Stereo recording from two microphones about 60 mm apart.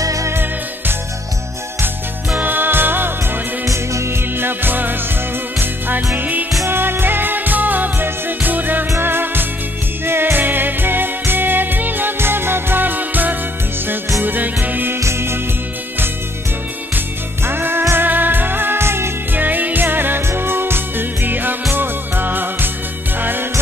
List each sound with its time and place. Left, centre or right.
0.0 s music: right
0.3 s music: right
2.3 s music: right
3.6 s music: right
4.5 s music: right
15.0 s music: right
17.5 s music: right
19.3 s music: right